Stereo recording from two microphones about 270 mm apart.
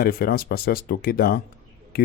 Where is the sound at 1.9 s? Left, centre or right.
Left.